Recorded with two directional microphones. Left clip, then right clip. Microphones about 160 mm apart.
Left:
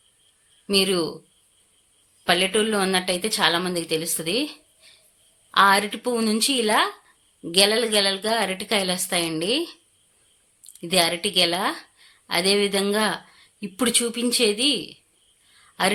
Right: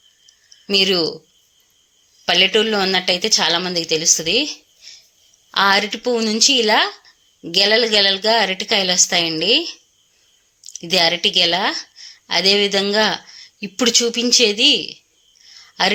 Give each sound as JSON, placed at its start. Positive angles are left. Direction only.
{"t": 0.7, "sound": "a woman's voice", "side_deg": -15}
{"t": 2.2, "sound": "a woman's voice", "side_deg": -10}